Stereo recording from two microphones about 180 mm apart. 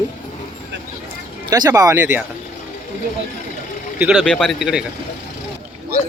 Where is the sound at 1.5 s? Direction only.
20° right (ahead or behind).